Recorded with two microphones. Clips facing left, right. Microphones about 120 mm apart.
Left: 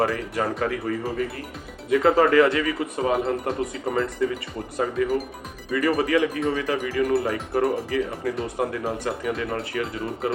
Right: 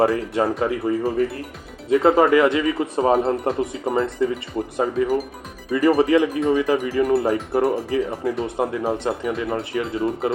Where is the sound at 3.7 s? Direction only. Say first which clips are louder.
Right 3 dB; 20° right (ahead or behind).